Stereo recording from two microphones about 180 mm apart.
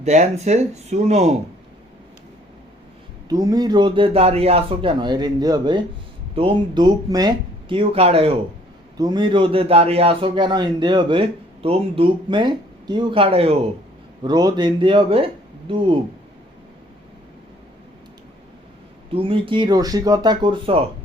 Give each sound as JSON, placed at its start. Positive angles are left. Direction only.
{"t": 0.0, "sound": "speech", "side_deg": -40}
{"t": 3.2, "sound": "a man's voice", "side_deg": -20}
{"t": 9.0, "sound": "a man's voice", "side_deg": -25}
{"t": 19.1, "sound": "a man's voice", "side_deg": -30}